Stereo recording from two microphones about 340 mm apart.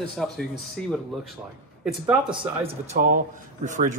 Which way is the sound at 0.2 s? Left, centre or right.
Centre.